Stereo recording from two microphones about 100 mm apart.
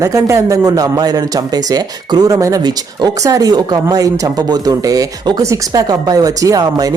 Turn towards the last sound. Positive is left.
turn(degrees=-40)  # may be behind; listen again after turning